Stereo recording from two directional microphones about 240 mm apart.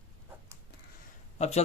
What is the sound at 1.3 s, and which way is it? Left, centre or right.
Speech, left.